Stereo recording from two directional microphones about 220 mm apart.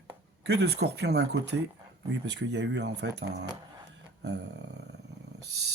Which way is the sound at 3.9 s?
50° right (ahead or behind).